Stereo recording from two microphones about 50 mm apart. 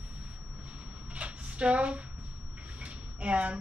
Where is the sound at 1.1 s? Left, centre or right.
Right.